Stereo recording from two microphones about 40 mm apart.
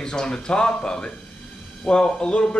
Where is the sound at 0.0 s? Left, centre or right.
Centre.